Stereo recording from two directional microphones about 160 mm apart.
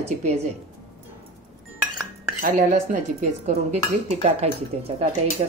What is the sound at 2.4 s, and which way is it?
Speech, 60° right (ahead or behind).